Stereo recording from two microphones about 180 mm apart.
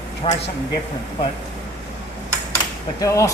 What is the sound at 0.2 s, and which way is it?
Speech, 30° left (ahead or behind).